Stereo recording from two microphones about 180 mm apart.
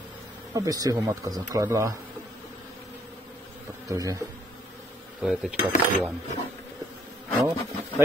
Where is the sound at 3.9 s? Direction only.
20° right (ahead or behind).